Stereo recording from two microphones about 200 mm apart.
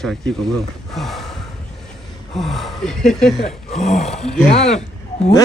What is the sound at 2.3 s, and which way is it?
Speech, centre (ahead or behind).